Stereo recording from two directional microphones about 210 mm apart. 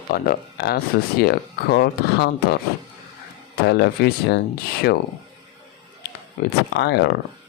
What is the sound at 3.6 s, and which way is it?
Speech, 50° left (ahead or behind).